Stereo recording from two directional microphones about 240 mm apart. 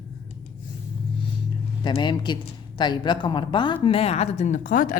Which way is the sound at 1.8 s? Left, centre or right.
Centre.